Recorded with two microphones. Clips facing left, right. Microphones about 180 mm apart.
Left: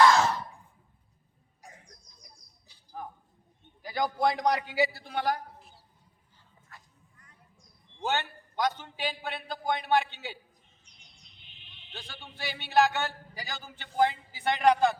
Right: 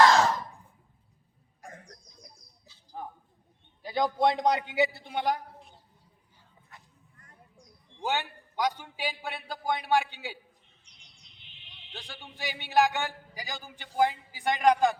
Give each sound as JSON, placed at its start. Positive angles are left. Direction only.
{"t": 1.6, "sound": "cough", "side_deg": -50}
{"t": 3.0, "sound": "a sound", "side_deg": -25}
{"t": 3.8, "sound": "a man's voice", "side_deg": -25}
{"t": 6.7, "sound": "a sound", "side_deg": -20}
{"t": 8.0, "sound": "a man's voice", "side_deg": -10}
{"t": 11.9, "sound": "a man's voice", "side_deg": -15}